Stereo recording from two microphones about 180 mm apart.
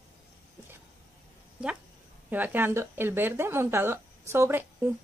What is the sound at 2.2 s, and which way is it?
Speech, 10° right (ahead or behind).